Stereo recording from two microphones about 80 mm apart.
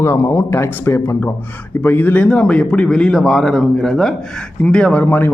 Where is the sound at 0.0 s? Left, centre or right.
Left.